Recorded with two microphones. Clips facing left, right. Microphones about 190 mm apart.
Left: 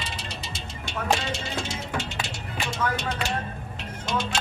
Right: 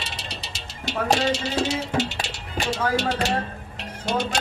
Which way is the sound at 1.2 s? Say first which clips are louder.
Right 8 dB; 70° right (ahead or behind).